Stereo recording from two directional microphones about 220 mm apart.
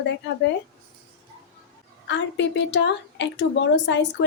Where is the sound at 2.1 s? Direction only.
55° left (ahead or behind).